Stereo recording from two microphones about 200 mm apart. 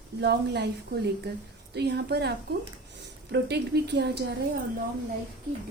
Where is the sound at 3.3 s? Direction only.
60° right (ahead or behind).